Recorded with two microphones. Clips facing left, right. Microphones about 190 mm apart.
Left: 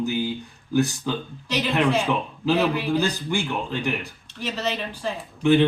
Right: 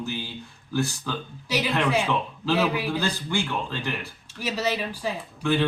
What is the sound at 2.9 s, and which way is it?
A man's voice, 15° left (ahead or behind).